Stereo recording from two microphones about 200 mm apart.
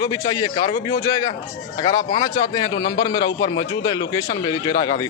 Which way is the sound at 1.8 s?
25° left (ahead or behind).